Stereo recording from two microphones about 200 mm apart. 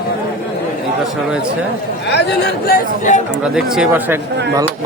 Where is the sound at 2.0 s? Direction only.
55° left (ahead or behind).